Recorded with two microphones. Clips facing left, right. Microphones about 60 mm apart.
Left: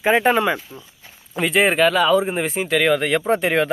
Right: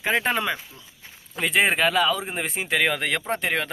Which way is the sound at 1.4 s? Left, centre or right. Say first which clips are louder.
Left 5 dB; centre.